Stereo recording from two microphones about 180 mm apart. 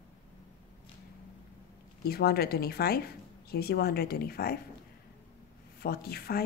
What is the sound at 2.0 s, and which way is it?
Speech, 60° left (ahead or behind).